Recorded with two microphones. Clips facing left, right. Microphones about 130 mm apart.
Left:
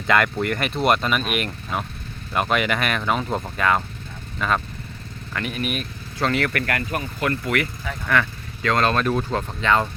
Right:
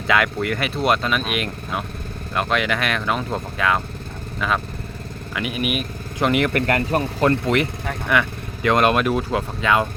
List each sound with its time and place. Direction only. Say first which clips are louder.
0.1 s speech: even; centre (ahead or behind)